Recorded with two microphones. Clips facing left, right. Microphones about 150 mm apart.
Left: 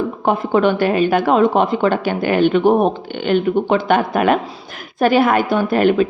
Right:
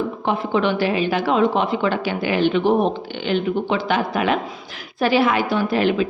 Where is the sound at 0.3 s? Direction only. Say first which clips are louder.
Left 5 dB; 45° left (ahead or behind).